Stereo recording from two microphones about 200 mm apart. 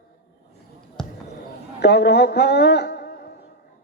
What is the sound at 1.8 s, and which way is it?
A man's voice, 55° left (ahead or behind).